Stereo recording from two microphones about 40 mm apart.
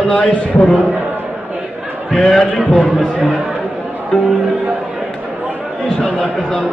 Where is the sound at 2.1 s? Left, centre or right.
Centre.